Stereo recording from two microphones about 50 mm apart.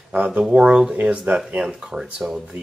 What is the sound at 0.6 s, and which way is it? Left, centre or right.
Speech, centre.